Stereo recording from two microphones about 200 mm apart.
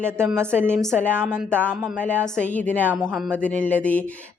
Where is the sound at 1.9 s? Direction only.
5° left (ahead or behind).